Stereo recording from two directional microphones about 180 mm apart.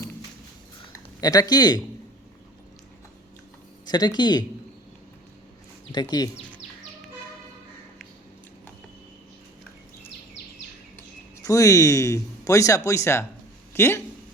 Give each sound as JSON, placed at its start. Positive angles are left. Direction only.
{"t": 1.2, "sound": "speech", "side_deg": 20}
{"t": 3.8, "sound": "speech", "side_deg": 25}
{"t": 5.9, "sound": "speech", "side_deg": 25}
{"t": 11.4, "sound": "speech", "side_deg": 20}